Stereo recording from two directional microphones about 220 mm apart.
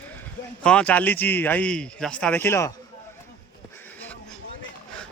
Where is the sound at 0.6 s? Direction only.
5° left (ahead or behind).